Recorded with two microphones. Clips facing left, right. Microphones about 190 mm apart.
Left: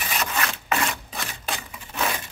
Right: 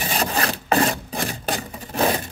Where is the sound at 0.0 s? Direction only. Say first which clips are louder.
Right 5 dB; 35° right (ahead or behind).